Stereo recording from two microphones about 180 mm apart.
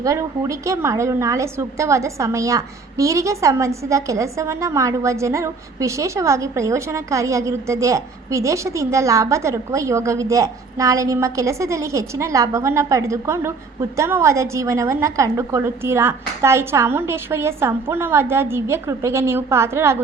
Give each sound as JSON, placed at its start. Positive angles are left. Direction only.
{"t": 0.0, "sound": "a woman's voice", "side_deg": -15}